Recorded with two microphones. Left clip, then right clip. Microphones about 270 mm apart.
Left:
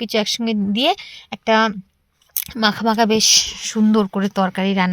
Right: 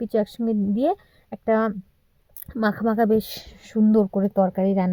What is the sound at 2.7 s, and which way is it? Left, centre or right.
Speech, left.